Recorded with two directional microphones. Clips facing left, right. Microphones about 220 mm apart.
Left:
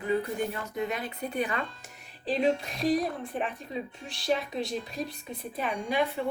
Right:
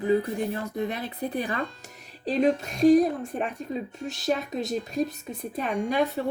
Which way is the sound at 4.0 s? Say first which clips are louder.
Right 1 dB; 45° right (ahead or behind).